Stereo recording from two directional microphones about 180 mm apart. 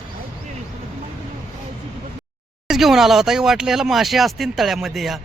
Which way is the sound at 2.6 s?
Centre (ahead or behind).